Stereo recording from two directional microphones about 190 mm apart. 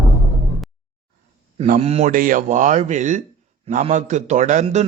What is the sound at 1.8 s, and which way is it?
Speech, 30° right (ahead or behind).